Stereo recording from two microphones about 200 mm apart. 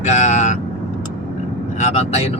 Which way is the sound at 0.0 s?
35° left (ahead or behind).